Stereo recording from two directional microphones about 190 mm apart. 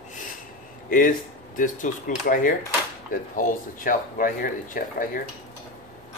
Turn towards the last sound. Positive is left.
turn(degrees=45)  # may be behind; listen again after turning